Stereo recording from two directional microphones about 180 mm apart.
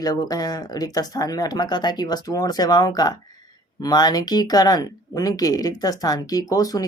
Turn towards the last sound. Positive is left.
turn(degrees=20)  # may be behind; listen again after turning